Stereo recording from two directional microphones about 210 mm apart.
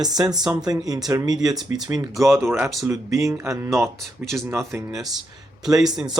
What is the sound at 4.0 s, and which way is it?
Speech, centre (ahead or behind).